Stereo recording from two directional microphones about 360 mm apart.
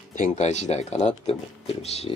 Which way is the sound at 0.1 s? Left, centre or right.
Left.